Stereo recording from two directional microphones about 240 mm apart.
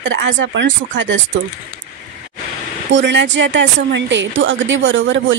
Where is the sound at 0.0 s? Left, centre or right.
Right.